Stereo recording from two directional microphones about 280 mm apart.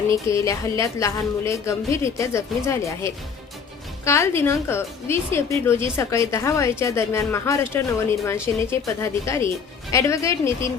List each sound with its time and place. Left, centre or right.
0.1 s a woman's voice: centre